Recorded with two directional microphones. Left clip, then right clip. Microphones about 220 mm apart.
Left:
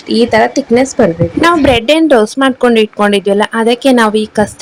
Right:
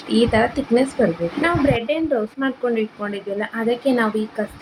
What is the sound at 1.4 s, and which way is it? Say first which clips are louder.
A woman's voice: left 11 dB; 50° left (ahead or behind).